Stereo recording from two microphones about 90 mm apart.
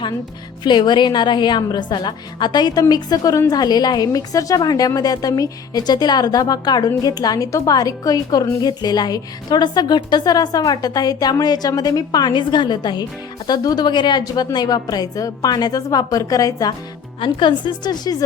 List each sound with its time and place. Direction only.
0.6 s a woman's voice: 60° left (ahead or behind); by 16.7 s 40° left (ahead or behind)
17.2 s a woman's voice: 65° left (ahead or behind); by 18.3 s 45° left (ahead or behind)